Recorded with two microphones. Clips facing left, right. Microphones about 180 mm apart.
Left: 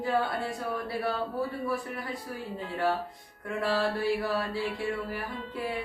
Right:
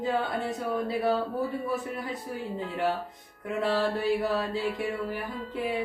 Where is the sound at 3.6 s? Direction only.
20° right (ahead or behind).